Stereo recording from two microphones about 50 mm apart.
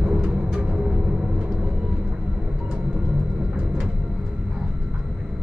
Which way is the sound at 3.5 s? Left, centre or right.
Centre.